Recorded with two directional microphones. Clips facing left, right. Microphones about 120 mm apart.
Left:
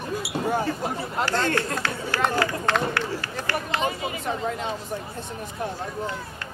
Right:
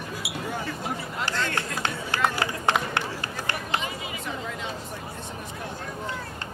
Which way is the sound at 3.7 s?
40° left (ahead or behind).